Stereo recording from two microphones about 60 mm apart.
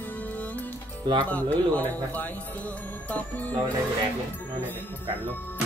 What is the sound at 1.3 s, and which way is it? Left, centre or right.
Speech, left.